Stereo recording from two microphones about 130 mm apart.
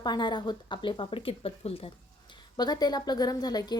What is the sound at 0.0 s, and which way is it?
Speech, 35° left (ahead or behind).